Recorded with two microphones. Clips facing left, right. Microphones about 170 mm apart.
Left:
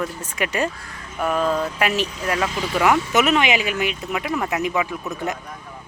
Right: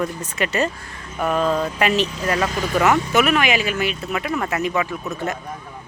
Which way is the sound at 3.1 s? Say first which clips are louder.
Even; 20° left (ahead or behind).